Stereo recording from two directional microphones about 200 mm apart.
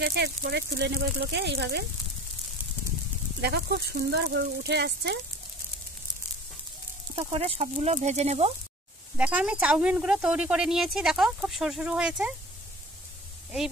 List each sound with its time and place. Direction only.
0.0 s speech: 50° right (ahead or behind)
3.3 s speech: 55° right (ahead or behind)
7.2 s speech: 30° right (ahead or behind)
9.1 s speech: 5° right (ahead or behind)